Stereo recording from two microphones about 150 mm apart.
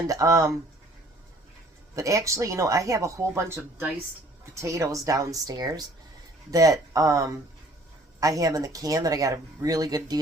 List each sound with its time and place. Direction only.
0.1 s speech: 20° right (ahead or behind)
2.0 s speech: 20° right (ahead or behind)